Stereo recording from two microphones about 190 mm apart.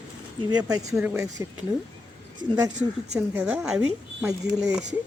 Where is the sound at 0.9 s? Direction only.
10° right (ahead or behind).